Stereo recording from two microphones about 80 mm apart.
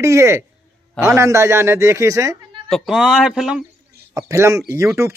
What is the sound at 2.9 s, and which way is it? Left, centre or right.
Speech, centre.